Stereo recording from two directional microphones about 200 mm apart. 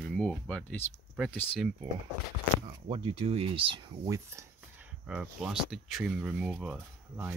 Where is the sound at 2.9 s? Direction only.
30° right (ahead or behind).